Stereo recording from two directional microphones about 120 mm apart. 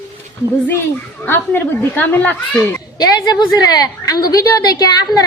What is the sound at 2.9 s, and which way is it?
A woman's voice, 35° left (ahead or behind).